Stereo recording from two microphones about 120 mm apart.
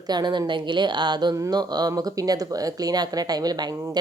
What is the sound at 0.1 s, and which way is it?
Speech, 35° right (ahead or behind).